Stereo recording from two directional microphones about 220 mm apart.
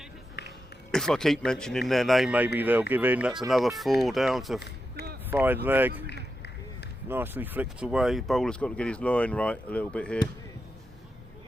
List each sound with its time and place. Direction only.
0.4 s a sound: 50° left (ahead or behind)
0.9 s speech: centre (ahead or behind)
6.1 s run: 50° left (ahead or behind)
7.1 s speech: 10° right (ahead or behind)